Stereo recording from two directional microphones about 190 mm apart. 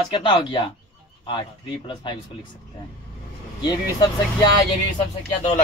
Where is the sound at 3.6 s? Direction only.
20° left (ahead or behind).